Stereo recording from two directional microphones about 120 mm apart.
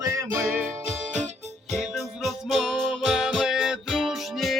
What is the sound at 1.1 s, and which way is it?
Music, 75° right (ahead or behind).